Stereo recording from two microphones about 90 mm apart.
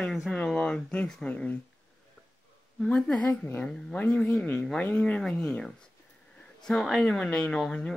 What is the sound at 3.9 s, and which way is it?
A woman's voice, 10° left (ahead or behind).